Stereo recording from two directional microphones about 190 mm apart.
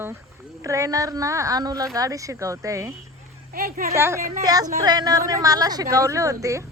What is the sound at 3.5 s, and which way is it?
Speech, 50° right (ahead or behind).